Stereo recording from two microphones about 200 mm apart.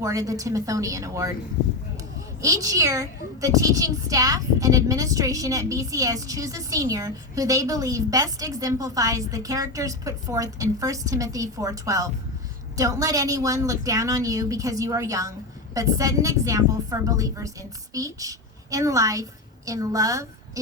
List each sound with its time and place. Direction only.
0.0 s a woman's voice: 15° right (ahead or behind)
2.4 s a woman's voice: 15° right (ahead or behind)